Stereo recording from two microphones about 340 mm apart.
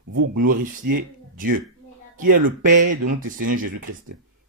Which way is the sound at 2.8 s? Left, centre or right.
Right.